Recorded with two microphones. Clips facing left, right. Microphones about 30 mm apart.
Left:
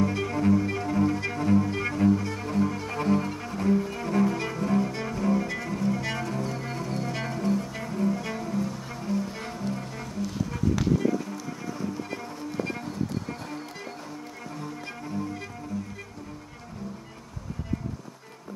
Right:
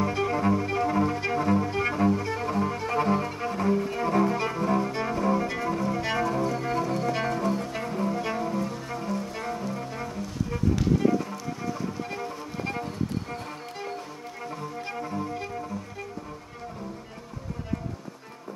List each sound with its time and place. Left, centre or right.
0.0 s cello: centre
7.4 s music: right
7.7 s cello: centre
11.1 s music: centre
14.6 s music: centre